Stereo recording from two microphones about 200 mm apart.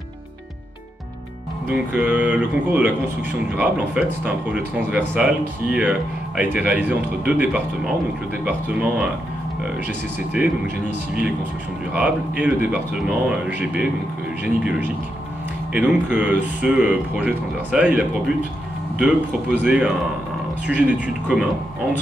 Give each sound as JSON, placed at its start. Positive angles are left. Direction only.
{"t": 1.7, "sound": "speech", "side_deg": -5}
{"t": 10.1, "sound": "speech", "side_deg": -5}
{"t": 11.9, "sound": "speech", "side_deg": -5}